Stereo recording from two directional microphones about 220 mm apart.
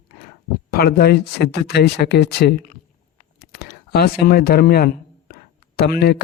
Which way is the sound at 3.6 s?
45° left (ahead or behind).